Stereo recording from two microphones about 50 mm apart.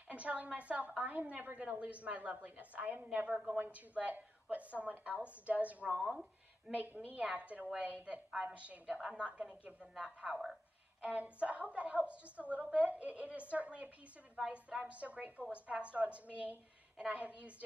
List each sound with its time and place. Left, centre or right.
0.1 s a woman's voice: right
8.3 s a woman's voice: centre
8.5 s a woman's voice: right